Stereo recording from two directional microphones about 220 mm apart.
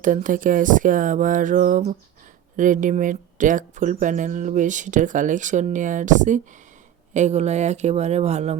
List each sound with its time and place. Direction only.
0.0 s speech: 35° right (ahead or behind)